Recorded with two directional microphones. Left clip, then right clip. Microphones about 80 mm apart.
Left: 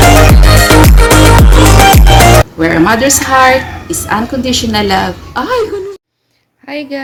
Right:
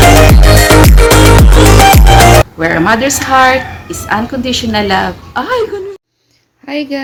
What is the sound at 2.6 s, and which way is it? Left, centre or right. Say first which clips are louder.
A woman's voice: left 1 dB; centre.